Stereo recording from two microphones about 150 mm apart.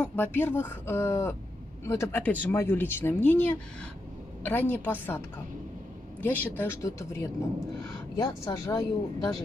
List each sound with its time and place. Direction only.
0.0 s speech: 10° left (ahead or behind)
6.2 s speech: 10° left (ahead or behind)